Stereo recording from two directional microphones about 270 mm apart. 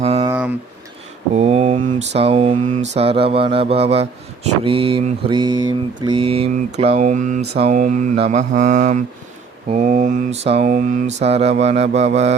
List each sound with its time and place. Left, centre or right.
0.0 s a sound: right
1.3 s speech: right
4.6 s mantra: centre